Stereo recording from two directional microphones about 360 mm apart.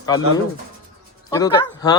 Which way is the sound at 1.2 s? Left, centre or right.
Centre.